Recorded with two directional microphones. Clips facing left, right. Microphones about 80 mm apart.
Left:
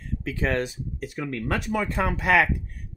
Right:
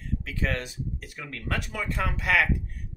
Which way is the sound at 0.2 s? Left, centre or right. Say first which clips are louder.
Left 7 dB; left.